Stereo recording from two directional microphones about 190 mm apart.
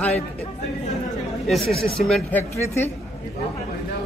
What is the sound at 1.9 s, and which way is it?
Speech, centre (ahead or behind).